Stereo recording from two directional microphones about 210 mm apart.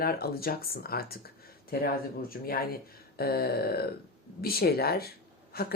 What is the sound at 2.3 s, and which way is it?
Speech, 45° left (ahead or behind).